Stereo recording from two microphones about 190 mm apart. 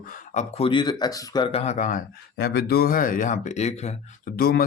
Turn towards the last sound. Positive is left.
turn(degrees=55)  # may be behind; listen again after turning